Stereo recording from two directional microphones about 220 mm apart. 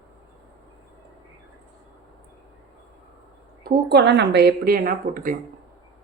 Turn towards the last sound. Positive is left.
turn(degrees=-40)  # may be behind; listen again after turning